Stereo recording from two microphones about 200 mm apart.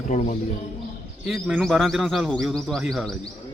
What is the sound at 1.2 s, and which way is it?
A man's voice, centre (ahead or behind).